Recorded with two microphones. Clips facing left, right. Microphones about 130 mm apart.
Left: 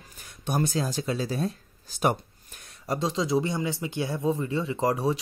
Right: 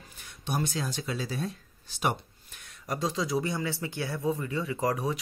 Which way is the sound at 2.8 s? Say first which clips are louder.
Left 3 dB; 25° left (ahead or behind).